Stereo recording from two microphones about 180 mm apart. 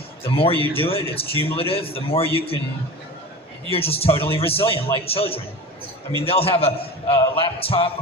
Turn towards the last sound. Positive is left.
turn(degrees=30)  # may be behind; listen again after turning